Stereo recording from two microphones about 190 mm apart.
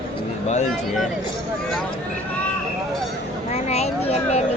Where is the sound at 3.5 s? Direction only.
35° left (ahead or behind).